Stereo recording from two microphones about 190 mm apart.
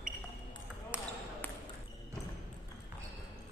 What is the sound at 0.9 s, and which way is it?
Ping, 5° right (ahead or behind).